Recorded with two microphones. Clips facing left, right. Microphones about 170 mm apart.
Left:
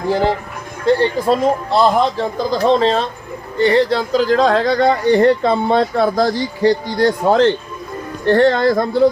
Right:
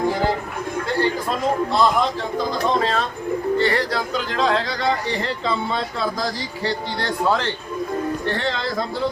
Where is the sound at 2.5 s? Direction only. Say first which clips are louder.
Left 8 dB; 30° left (ahead or behind); by 6.7 s 60° left (ahead or behind).